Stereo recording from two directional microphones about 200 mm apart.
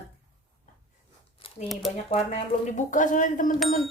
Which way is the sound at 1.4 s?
25° left (ahead or behind).